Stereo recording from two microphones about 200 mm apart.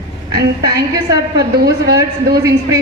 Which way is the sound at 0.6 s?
20° right (ahead or behind).